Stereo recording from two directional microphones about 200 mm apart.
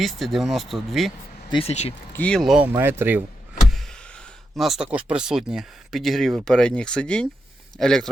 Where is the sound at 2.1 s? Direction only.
5° left (ahead or behind); by 3.2 s 10° right (ahead or behind).